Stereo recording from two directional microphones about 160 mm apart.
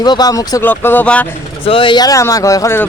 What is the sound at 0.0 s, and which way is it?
Speech, 25° left (ahead or behind).